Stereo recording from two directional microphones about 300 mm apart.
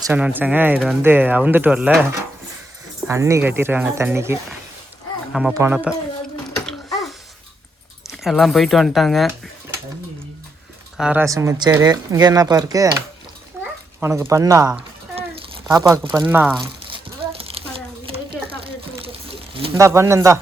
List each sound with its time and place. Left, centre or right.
0.0 s speech: centre
3.1 s speech: centre
6.7 s a sound: centre
8.0 s speech: centre
10.9 s speech: centre
13.6 s a sound: centre
14.0 s speech: centre
16.9 s a sound: centre
19.5 s speech: centre